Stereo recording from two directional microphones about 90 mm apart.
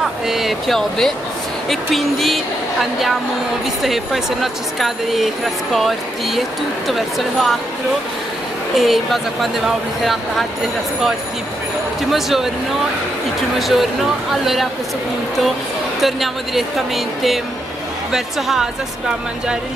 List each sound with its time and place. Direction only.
0.0 s speech: 5° right (ahead or behind)
8.7 s speech: centre (ahead or behind)
12.0 s speech: centre (ahead or behind)
13.6 s speech: centre (ahead or behind)
16.0 s speech: centre (ahead or behind)